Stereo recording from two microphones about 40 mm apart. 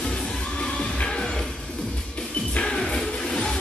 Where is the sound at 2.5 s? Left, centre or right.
Left.